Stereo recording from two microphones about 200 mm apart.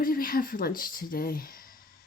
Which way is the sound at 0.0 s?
45° left (ahead or behind).